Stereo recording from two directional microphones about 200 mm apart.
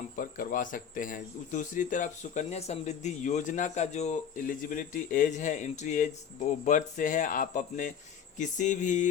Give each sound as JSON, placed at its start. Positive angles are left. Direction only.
{"t": 0.2, "sound": "speech", "side_deg": 45}